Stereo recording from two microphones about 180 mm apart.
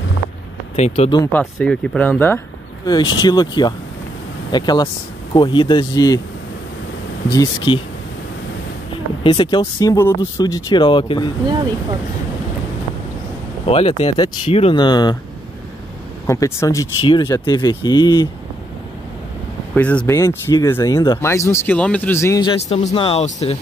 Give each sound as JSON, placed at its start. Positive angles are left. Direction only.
{"t": 0.7, "sound": "speech", "side_deg": 35}
{"t": 1.3, "sound": "speech", "side_deg": 5}
{"t": 7.2, "sound": "speech", "side_deg": 25}
{"t": 9.2, "sound": "speech", "side_deg": 30}
{"t": 13.7, "sound": "speech", "side_deg": 35}
{"t": 16.3, "sound": "speech", "side_deg": 15}
{"t": 17.0, "sound": "speech", "side_deg": 25}
{"t": 19.7, "sound": "speech", "side_deg": 5}
{"t": 22.7, "sound": "speech", "side_deg": 35}